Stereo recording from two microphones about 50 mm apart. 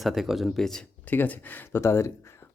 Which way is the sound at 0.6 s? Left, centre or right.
Centre.